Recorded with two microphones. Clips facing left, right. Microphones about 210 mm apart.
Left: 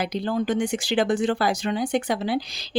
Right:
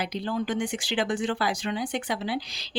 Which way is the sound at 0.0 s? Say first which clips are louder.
Left 4 dB; 45° left (ahead or behind).